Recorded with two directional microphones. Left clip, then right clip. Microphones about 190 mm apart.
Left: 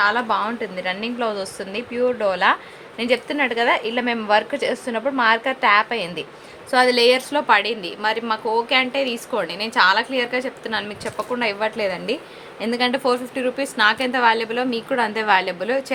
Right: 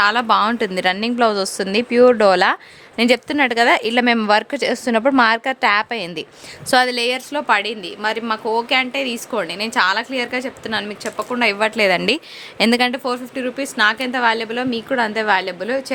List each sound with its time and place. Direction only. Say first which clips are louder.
0.0 s a woman's voice: right 4 dB; 45° right (ahead or behind); by 6.2 s 70° right (ahead or behind)
6.7 s a woman's voice: left 1 dB; 50° right (ahead or behind)
12.8 s a woman's voice: even; 30° right (ahead or behind)